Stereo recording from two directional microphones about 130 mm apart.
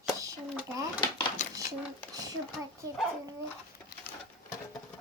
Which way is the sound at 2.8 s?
30° right (ahead or behind).